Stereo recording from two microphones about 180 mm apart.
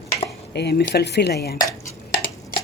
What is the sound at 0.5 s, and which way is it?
Speech, 65° left (ahead or behind).